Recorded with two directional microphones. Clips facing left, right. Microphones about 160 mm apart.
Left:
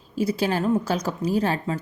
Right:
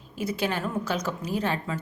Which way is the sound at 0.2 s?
35° left (ahead or behind).